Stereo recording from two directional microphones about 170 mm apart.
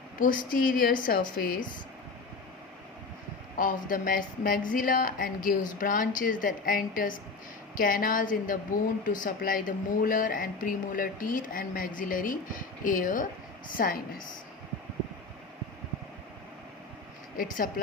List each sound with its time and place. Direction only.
0.2 s speech: 55° left (ahead or behind)
3.6 s speech: 55° left (ahead or behind)
17.3 s speech: 60° left (ahead or behind)